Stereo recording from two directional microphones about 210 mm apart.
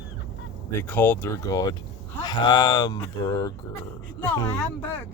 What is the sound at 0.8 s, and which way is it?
Speech, 10° left (ahead or behind).